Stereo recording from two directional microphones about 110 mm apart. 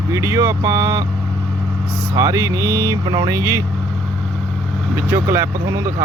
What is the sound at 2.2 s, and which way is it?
Speech, 30° right (ahead or behind).